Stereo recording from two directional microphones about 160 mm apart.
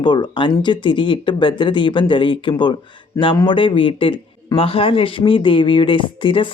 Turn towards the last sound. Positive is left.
turn(degrees=30)  # may be behind; listen again after turning